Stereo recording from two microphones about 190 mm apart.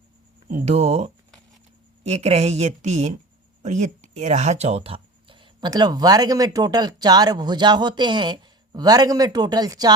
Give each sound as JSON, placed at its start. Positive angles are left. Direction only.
{"t": 0.4, "sound": "speech", "side_deg": -35}